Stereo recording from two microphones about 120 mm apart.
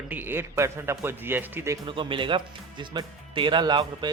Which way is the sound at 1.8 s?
45° right (ahead or behind).